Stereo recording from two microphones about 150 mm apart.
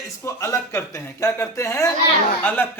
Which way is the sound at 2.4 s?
10° left (ahead or behind).